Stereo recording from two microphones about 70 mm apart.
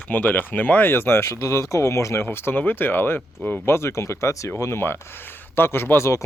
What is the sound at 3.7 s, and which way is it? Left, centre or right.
Speech, left.